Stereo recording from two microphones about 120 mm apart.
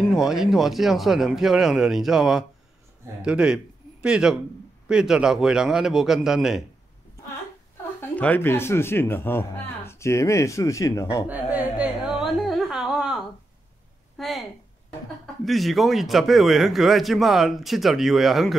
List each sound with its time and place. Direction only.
0.0 s a man's voice: centre (ahead or behind)
8.2 s speech: 15° left (ahead or behind)
11.2 s a sound: 15° right (ahead or behind)
15.4 s a man's voice: centre (ahead or behind)